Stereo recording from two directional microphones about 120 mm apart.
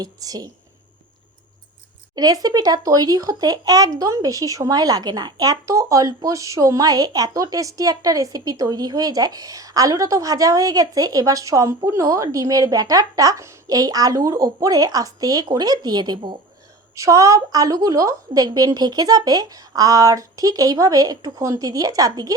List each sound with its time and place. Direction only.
0.0 s a woman's voice: 30° right (ahead or behind)
2.1 s speech: 30° right (ahead or behind)
16.9 s a woman's voice: 25° right (ahead or behind)